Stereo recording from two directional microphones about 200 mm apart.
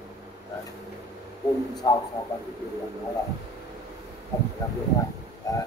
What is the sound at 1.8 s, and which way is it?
Speech, 20° left (ahead or behind).